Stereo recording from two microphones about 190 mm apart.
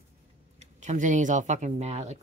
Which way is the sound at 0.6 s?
40° right (ahead or behind).